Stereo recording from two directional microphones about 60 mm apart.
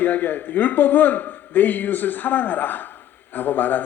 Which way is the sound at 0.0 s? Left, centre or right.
Left.